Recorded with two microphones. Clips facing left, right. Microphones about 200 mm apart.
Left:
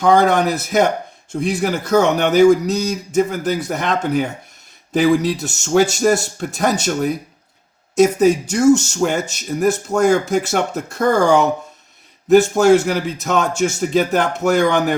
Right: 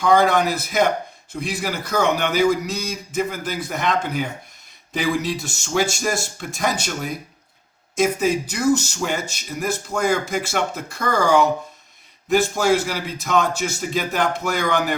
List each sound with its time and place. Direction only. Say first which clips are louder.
0.0 s a man's voice: left 3 dB; 45° left (ahead or behind)